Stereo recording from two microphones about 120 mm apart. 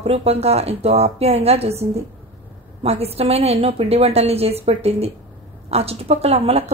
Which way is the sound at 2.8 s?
60° right (ahead or behind).